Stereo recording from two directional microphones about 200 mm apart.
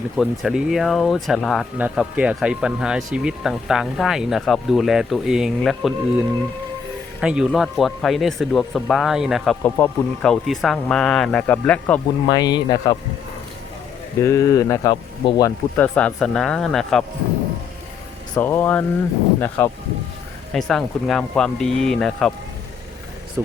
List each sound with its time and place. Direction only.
0.2 s speech: centre (ahead or behind)
12.3 s speech: 20° left (ahead or behind)
14.2 s speech: 15° left (ahead or behind)
18.3 s speech: 10° left (ahead or behind)